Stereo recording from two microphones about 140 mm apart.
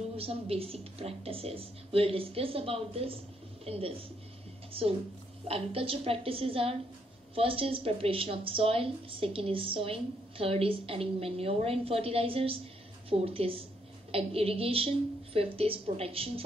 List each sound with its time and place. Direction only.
0.2 s a woman's voice: 45° right (ahead or behind)